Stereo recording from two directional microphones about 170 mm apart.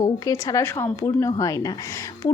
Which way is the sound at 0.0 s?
20° left (ahead or behind).